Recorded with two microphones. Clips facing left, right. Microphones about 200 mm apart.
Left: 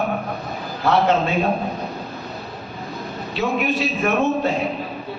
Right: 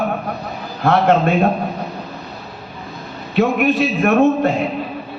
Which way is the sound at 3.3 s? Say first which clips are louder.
Right 7 dB; 55° right (ahead or behind).